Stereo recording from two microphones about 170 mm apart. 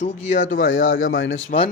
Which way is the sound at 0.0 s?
45° left (ahead or behind).